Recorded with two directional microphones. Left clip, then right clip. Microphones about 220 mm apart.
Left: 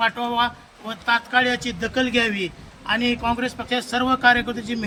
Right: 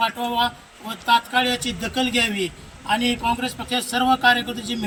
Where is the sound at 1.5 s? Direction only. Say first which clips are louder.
Left 1 dB; 5° left (ahead or behind).